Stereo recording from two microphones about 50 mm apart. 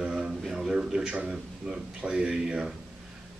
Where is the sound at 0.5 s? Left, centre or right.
Centre.